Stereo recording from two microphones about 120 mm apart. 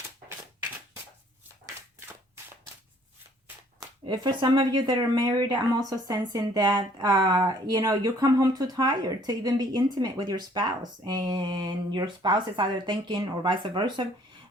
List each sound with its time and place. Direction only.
4.1 s speech: 40° right (ahead or behind)